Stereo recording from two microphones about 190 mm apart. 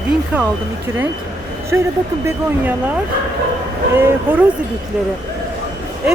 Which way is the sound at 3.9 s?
10° right (ahead or behind).